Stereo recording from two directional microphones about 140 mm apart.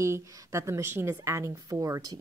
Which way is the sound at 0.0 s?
20° right (ahead or behind).